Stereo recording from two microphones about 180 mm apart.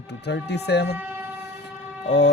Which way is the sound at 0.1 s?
70° left (ahead or behind).